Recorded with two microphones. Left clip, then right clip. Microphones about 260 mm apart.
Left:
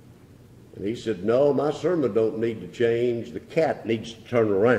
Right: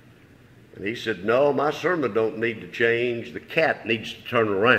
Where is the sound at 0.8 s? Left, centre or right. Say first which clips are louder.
Even; centre.